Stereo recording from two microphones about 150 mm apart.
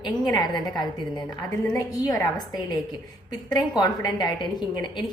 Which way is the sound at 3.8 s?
25° left (ahead or behind).